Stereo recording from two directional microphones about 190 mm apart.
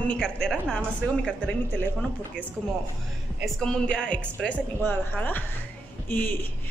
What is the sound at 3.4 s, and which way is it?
A man's voice, centre (ahead or behind).